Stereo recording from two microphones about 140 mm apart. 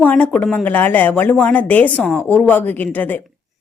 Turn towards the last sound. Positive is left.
turn(degrees=15)  # may be behind; listen again after turning